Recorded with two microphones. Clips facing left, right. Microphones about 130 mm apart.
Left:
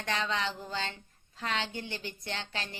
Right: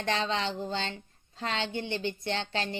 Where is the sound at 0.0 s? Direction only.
25° right (ahead or behind).